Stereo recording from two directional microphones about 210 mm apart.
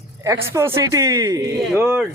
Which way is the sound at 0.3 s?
10° right (ahead or behind).